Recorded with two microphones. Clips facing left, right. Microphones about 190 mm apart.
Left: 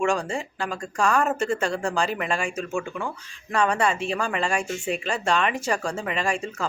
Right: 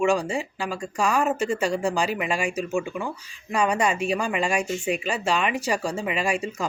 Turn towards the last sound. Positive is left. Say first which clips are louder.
# right 1 dB
turn(degrees=-10)  # may be behind; listen again after turning